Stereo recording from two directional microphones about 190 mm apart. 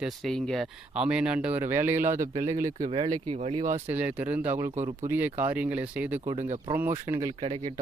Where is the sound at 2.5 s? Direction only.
15° right (ahead or behind).